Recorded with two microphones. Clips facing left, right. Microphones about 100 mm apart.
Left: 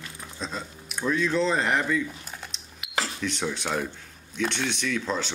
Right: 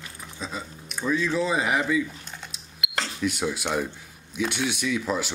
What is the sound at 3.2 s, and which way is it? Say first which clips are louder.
Speech: right 3 dB; 10° right (ahead or behind).